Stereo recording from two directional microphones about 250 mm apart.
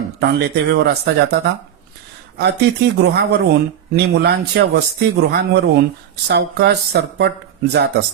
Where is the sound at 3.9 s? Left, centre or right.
Right.